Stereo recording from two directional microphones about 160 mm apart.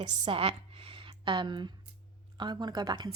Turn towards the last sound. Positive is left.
turn(degrees=-25)  # may be behind; listen again after turning